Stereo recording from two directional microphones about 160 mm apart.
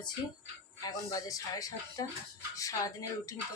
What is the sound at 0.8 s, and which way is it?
Speech, 20° left (ahead or behind).